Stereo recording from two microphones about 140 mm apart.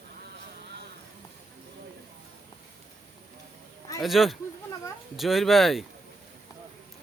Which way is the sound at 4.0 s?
Centre (ahead or behind).